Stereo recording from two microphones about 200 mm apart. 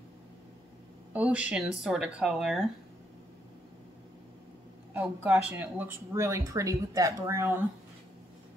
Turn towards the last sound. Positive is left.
turn(degrees=-15)  # may be behind; listen again after turning